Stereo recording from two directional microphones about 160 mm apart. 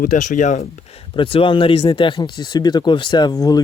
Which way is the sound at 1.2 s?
35° left (ahead or behind).